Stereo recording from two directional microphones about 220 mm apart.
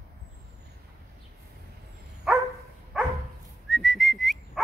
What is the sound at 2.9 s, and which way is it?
Dog, 5° right (ahead or behind).